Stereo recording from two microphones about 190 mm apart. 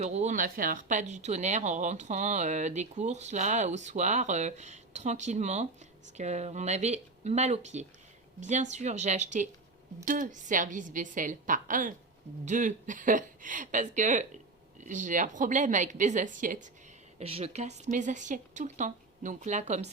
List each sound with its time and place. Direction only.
0.0 s a woman's voice: 35° right (ahead or behind)
17.2 s speech: 35° right (ahead or behind)